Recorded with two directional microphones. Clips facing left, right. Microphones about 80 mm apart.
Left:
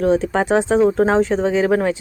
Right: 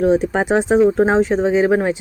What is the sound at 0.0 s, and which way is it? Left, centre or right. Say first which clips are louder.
Speech: right 1 dB; centre.